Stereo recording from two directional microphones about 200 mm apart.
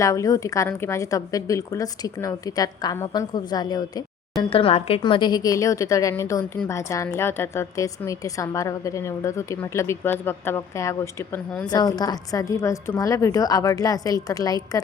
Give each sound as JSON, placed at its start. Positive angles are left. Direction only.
{"t": 0.0, "sound": "a woman's voice", "side_deg": 15}